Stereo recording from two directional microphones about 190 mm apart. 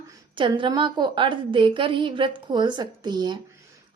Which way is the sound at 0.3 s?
25° right (ahead or behind).